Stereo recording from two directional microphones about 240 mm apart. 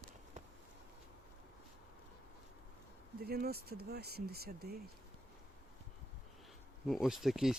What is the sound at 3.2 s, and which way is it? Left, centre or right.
Speech, right.